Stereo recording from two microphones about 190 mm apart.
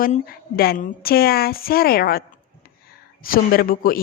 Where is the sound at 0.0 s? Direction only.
50° left (ahead or behind).